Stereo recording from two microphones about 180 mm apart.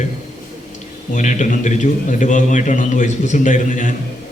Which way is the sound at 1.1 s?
45° left (ahead or behind).